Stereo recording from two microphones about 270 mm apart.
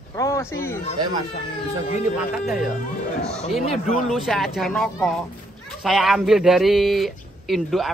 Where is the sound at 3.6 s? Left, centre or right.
Left.